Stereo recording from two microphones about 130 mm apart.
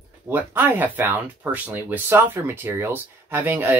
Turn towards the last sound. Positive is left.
turn(degrees=-15)  # may be behind; listen again after turning